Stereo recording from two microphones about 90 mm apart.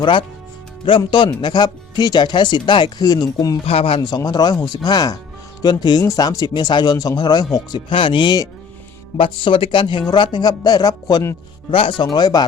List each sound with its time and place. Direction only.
0.0 s speech: 65° left (ahead or behind)
1.4 s speech: 55° left (ahead or behind)
3.7 s speech: 90° left
4.0 s speech: 50° left (ahead or behind)
7.9 s speech: 70° left (ahead or behind); by 8.4 s 55° left (ahead or behind)
9.1 s speech: 75° left (ahead or behind)
10.1 s speech: 55° left (ahead or behind)
11.7 s speech: 80° left
12.1 s speech: 50° left (ahead or behind)